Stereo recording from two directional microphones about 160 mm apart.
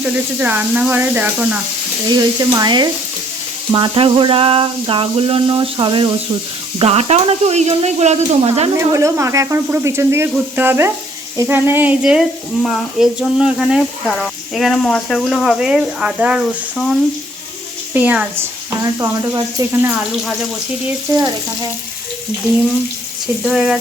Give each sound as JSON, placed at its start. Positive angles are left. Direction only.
{"t": 0.0, "sound": "speech", "side_deg": -10}
{"t": 2.0, "sound": "speech", "side_deg": -25}
{"t": 3.7, "sound": "a sound", "side_deg": -30}
{"t": 8.7, "sound": "speech", "side_deg": -20}
{"t": 23.4, "sound": "speech", "side_deg": -5}